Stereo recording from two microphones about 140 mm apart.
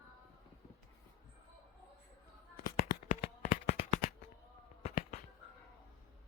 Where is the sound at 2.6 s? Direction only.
90° left.